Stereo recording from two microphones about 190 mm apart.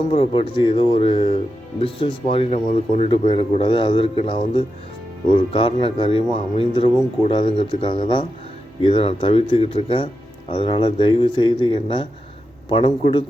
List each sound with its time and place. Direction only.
0.1 s speech: 25° left (ahead or behind)